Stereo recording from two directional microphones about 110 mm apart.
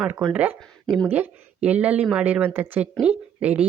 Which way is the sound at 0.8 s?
5° left (ahead or behind).